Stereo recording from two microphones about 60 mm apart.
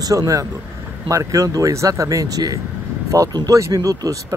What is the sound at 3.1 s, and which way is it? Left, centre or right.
Speech, right.